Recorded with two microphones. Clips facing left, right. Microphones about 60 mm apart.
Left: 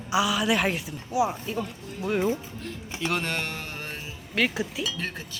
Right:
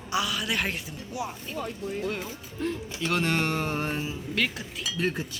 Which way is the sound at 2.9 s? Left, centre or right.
Centre.